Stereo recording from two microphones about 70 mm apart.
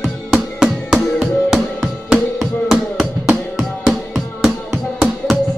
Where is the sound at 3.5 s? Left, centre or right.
Centre.